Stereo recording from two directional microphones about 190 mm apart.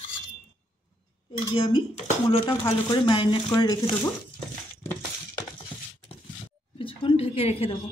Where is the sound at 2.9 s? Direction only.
25° left (ahead or behind).